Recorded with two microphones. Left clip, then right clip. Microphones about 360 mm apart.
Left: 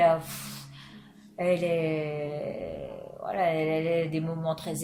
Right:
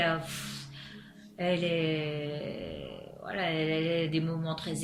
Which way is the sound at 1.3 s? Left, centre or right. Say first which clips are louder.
Left 4 dB; centre.